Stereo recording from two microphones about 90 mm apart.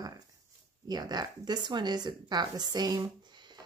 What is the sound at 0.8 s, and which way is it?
Speech, 50° right (ahead or behind).